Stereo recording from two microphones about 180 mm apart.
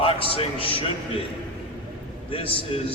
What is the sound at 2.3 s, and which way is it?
Speech, 30° left (ahead or behind).